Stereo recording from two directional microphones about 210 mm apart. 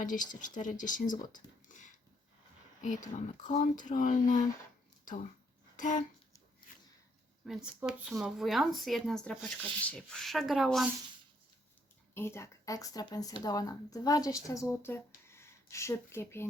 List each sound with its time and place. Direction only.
0.0 s speech: 40° left (ahead or behind)
5.7 s a sound: 35° left (ahead or behind)
7.4 s speech: 5° right (ahead or behind)
12.1 s speech: 10° left (ahead or behind)